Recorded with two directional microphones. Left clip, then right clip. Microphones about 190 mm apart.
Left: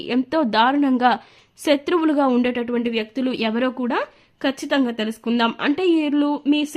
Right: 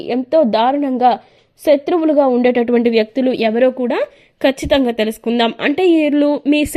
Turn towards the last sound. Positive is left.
turn(degrees=-20)  # may be behind; listen again after turning